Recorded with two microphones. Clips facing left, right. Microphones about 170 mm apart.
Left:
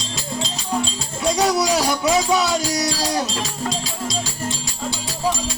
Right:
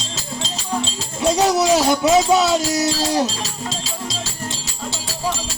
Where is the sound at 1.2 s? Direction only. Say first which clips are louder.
Right 3 dB; 20° right (ahead or behind).